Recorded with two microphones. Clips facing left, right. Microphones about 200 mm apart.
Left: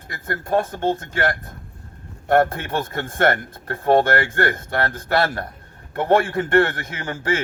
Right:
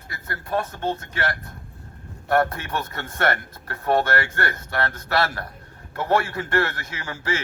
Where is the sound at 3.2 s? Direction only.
25° left (ahead or behind).